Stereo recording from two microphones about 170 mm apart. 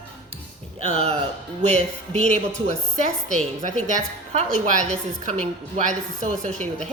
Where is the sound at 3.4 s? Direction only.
45° right (ahead or behind).